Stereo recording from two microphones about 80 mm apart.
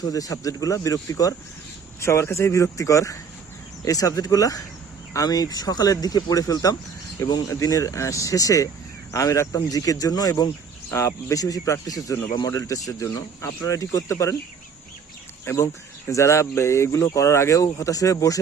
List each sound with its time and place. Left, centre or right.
0.0 s speech: left
2.0 s speech: left
10.9 s speech: left
15.4 s speech: left